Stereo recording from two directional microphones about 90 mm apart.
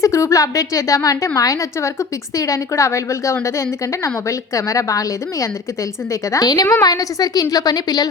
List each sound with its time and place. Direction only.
0.0 s a woman's voice: 35° left (ahead or behind)